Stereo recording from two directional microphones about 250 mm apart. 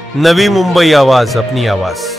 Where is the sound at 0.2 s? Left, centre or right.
Centre.